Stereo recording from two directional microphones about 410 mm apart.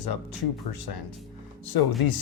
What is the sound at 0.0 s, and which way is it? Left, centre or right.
Speech, left.